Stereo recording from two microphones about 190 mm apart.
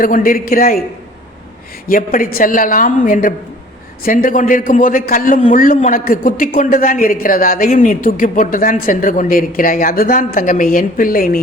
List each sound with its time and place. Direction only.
0.0 s a man's voice: 45° left (ahead or behind)
1.9 s a man's voice: 45° left (ahead or behind)